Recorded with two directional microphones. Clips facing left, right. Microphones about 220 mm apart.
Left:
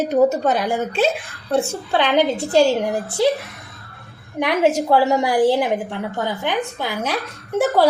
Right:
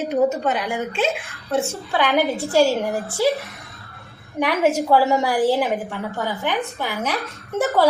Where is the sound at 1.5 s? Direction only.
25° left (ahead or behind).